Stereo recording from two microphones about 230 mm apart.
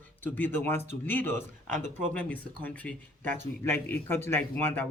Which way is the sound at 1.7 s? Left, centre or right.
Right.